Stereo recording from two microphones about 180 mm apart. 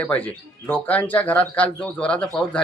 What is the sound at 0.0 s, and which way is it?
Speech, 10° left (ahead or behind).